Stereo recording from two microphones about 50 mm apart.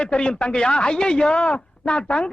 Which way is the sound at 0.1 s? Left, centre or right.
Centre.